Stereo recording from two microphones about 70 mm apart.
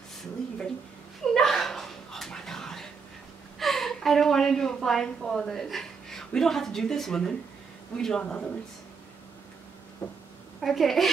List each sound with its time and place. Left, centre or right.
1.3 s a sound: centre
8.0 s speech: centre
10.0 s speech: left
10.6 s a woman's voice: centre